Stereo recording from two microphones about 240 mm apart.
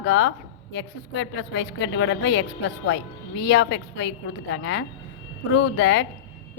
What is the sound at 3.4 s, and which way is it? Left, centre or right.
A woman's voice, left.